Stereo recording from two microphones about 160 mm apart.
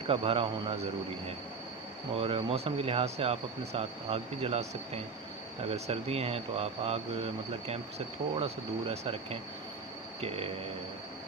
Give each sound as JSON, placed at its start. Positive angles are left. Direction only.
{"t": 0.1, "sound": "speech", "side_deg": -35}
{"t": 2.1, "sound": "speech", "side_deg": -35}